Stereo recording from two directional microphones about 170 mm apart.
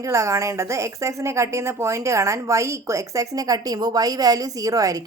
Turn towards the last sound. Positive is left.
turn(degrees=-20)  # may be behind; listen again after turning